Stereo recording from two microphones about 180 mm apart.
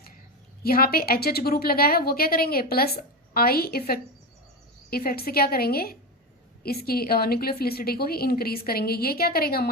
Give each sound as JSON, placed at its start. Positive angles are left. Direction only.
{"t": 0.6, "sound": "a woman's voice", "side_deg": 55}